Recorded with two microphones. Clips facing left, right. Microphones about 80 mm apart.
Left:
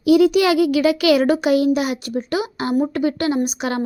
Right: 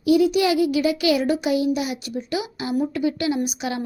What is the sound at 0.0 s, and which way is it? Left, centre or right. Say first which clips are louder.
A child's voice: left 4 dB; left.